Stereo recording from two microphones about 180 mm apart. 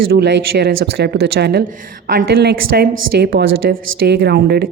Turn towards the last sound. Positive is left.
turn(degrees=-60)  # may be behind; listen again after turning